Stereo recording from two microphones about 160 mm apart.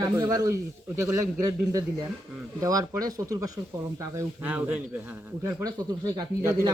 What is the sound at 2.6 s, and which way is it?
Speech, 20° right (ahead or behind).